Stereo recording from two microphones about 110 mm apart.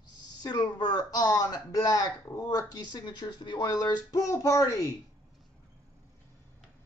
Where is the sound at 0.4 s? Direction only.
40° left (ahead or behind).